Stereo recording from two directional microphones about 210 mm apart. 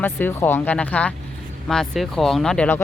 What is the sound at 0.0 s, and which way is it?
Speech, 10° left (ahead or behind).